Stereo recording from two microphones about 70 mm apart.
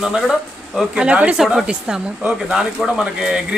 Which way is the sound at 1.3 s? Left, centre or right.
Centre.